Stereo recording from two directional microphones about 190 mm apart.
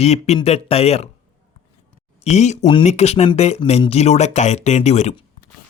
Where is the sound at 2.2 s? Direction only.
35° left (ahead or behind).